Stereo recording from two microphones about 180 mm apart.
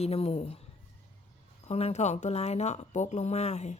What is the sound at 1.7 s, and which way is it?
A woman's voice, 35° left (ahead or behind).